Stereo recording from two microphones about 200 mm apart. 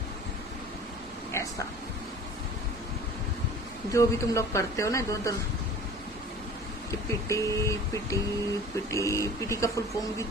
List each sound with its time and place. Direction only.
1.3 s a sound: 15° left (ahead or behind)
3.9 s speech: 15° left (ahead or behind)
7.1 s speech: 15° left (ahead or behind)